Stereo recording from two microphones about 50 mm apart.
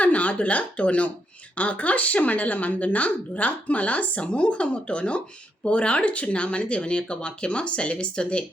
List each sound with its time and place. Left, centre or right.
0.0 s speech: left